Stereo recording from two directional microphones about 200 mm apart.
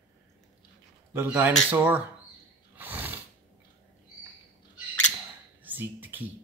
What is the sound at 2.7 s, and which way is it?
Roar, 10° right (ahead or behind).